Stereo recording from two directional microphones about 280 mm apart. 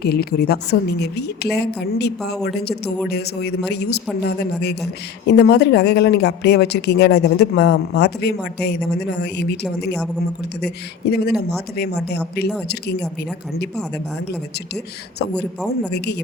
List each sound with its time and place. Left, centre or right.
0.0 s speech: left
15.9 s speech: left